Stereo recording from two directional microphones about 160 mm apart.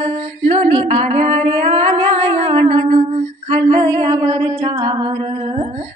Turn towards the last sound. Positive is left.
turn(degrees=-25)  # may be behind; listen again after turning